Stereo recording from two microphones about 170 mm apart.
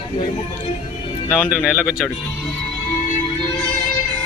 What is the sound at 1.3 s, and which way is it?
Speech, 5° right (ahead or behind).